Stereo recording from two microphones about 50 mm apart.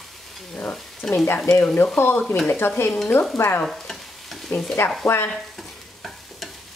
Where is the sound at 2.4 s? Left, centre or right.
Left.